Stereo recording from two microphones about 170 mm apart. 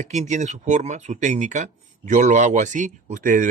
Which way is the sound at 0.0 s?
45° right (ahead or behind).